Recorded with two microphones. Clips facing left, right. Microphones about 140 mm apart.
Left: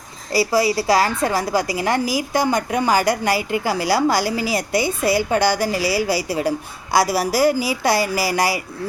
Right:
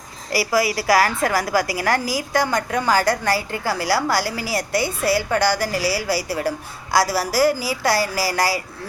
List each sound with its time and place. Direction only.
0.3 s a woman's voice: 25° left (ahead or behind)